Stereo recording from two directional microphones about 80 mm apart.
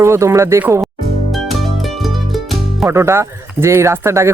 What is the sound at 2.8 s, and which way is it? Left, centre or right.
Speech, right.